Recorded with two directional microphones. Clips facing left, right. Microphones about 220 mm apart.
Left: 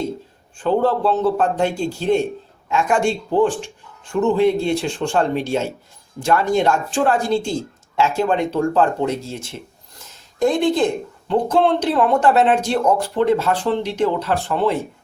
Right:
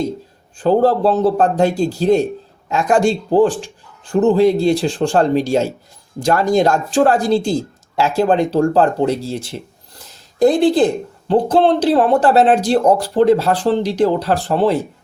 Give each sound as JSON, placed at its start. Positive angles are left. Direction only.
{"t": 0.6, "sound": "speech", "side_deg": -35}